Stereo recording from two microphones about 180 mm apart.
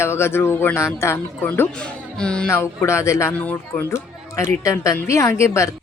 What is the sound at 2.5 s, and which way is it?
Speech, 15° left (ahead or behind).